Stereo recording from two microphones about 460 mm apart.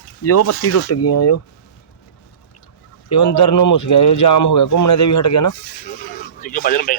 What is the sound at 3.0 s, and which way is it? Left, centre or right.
Speech, left.